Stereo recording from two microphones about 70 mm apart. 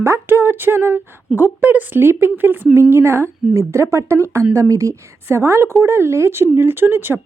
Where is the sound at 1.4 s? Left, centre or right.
Right.